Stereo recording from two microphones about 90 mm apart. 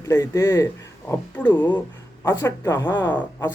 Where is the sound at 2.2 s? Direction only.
30° left (ahead or behind).